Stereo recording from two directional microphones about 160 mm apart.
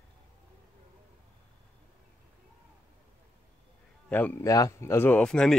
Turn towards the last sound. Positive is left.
turn(degrees=5)  # may be behind; listen again after turning